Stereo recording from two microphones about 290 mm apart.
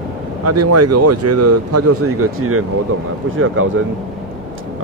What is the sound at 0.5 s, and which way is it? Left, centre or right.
Speech, right.